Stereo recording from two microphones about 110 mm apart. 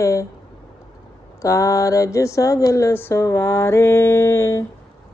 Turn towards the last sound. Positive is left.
turn(degrees=25)  # may be behind; listen again after turning